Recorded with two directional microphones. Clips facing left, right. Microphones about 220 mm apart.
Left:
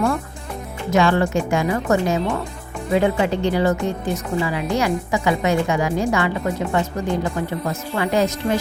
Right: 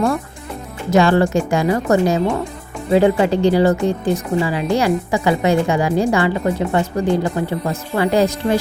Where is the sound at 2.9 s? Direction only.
35° right (ahead or behind).